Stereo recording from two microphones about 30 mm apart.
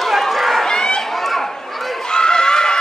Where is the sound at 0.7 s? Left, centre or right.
Left.